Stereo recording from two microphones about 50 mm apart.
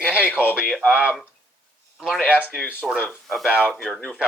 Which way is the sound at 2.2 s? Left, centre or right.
Right.